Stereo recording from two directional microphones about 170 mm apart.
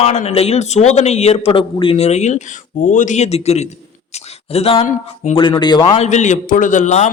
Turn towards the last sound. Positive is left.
turn(degrees=45)  # may be behind; listen again after turning